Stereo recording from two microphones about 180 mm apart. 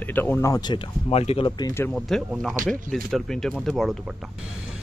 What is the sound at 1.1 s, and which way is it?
Speech, 35° left (ahead or behind).